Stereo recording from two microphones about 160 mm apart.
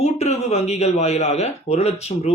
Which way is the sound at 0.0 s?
45° left (ahead or behind).